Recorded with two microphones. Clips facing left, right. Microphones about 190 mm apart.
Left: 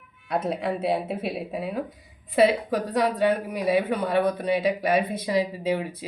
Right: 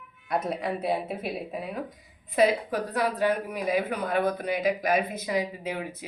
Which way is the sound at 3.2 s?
30° left (ahead or behind).